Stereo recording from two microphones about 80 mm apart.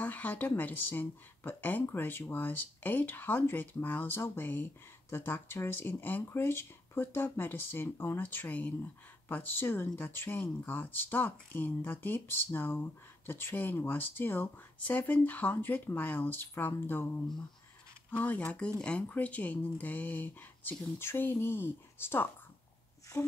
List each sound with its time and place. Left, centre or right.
0.0 s speech: centre